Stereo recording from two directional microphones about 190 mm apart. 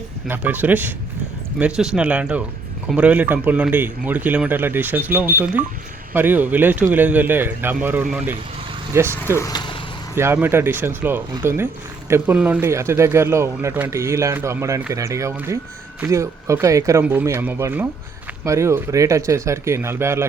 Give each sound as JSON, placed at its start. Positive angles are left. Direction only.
{"t": 0.3, "sound": "speech", "side_deg": -10}
{"t": 9.4, "sound": "vehicle", "side_deg": 20}
{"t": 10.2, "sound": "speech", "side_deg": -10}